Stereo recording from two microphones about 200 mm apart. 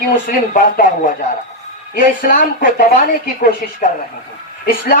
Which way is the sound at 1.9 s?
45° left (ahead or behind).